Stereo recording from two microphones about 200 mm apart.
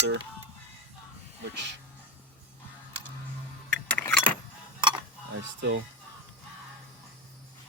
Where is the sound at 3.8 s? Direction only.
5° left (ahead or behind).